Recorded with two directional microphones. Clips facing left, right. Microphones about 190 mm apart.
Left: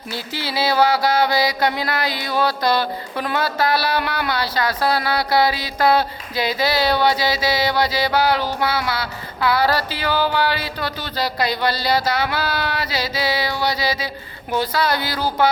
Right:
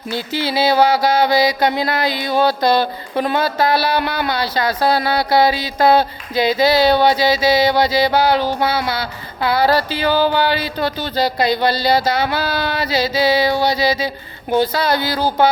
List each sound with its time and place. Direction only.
0.1 s mantra: 20° right (ahead or behind)